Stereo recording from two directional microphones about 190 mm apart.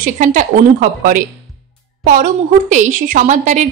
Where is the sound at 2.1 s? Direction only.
40° right (ahead or behind).